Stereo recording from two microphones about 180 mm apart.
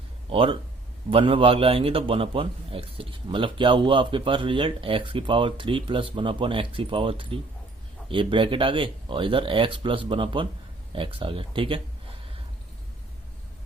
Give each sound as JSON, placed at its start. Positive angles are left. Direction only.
{"t": 0.3, "sound": "a man's voice", "side_deg": -30}